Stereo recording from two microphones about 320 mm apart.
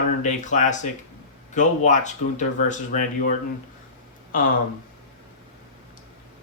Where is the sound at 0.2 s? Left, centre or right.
Left.